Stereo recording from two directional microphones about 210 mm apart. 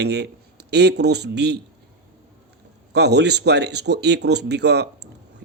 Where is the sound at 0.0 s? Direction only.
50° right (ahead or behind).